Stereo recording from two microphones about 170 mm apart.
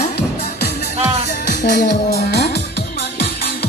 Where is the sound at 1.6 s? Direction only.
70° left (ahead or behind).